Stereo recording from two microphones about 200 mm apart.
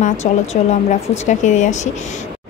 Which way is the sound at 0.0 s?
35° left (ahead or behind).